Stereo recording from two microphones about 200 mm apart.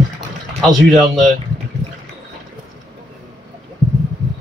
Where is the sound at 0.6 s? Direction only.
Centre (ahead or behind).